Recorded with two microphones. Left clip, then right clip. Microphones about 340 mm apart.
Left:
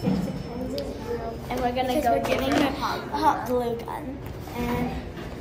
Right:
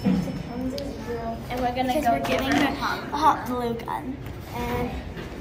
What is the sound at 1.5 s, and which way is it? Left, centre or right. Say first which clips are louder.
Speech: even; centre.